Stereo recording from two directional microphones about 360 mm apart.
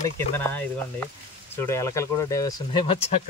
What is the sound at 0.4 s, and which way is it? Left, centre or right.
Speech, centre.